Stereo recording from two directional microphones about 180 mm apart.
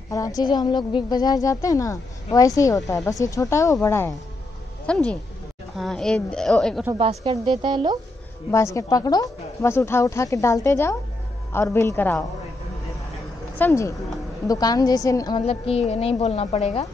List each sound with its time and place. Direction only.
0.1 s a woman's voice: 20° left (ahead or behind); by 6.9 s centre (ahead or behind)
7.0 s a woman's voice: 30° right (ahead or behind)
8.7 s a woman's voice: 20° left (ahead or behind)
13.6 s a woman's voice: 15° left (ahead or behind)
15.3 s a woman's voice: 30° left (ahead or behind)